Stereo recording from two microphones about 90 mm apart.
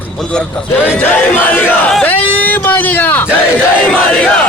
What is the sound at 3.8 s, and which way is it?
Speech, 15° left (ahead or behind).